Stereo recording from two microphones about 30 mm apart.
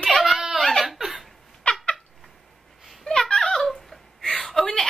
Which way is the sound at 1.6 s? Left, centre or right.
Left.